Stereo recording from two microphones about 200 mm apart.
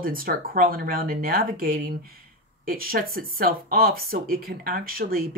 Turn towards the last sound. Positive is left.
turn(degrees=-45)  # may be behind; listen again after turning